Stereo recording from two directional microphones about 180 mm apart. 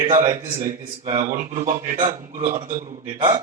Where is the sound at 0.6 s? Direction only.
30° right (ahead or behind).